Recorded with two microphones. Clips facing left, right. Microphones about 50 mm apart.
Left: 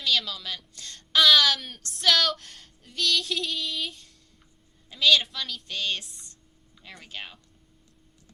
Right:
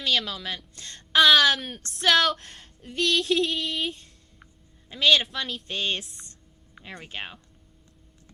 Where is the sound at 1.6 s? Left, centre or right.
Right.